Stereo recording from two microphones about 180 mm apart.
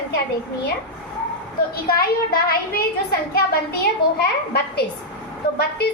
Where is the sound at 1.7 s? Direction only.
55° left (ahead or behind).